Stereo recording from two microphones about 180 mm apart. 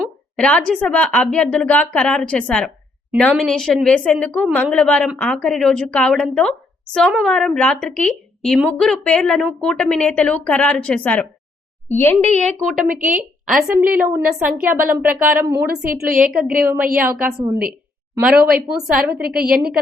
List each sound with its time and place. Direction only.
0.3 s a woman's voice: 5° left (ahead or behind)